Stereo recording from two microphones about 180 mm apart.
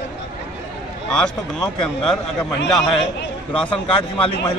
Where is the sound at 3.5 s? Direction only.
30° left (ahead or behind).